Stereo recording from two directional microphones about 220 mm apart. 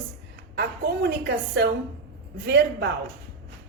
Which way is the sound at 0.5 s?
45° right (ahead or behind).